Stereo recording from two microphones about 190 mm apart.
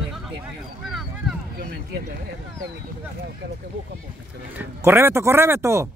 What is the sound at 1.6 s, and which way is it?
Speech, 60° right (ahead or behind).